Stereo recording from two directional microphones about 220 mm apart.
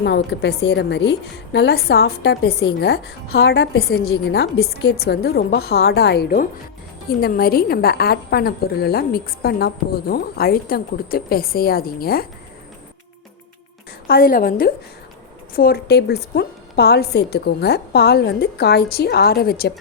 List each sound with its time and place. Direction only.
0.0 s a woman's voice: 50° left (ahead or behind)
14.1 s a woman's voice: 40° left (ahead or behind)